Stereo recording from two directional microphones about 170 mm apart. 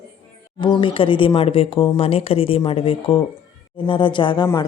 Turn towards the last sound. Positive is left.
turn(degrees=25)  # may be behind; listen again after turning